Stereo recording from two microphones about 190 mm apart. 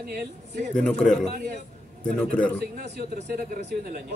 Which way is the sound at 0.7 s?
5° left (ahead or behind).